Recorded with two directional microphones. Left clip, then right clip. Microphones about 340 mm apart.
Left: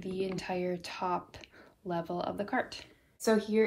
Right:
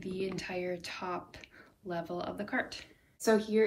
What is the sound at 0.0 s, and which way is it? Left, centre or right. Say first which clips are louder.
Speech: left 2 dB; centre.